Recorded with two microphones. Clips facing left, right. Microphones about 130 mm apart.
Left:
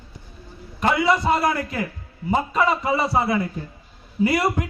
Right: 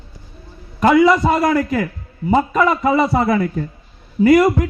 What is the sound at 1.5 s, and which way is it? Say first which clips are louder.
A man's voice: right 8 dB; 45° right (ahead or behind).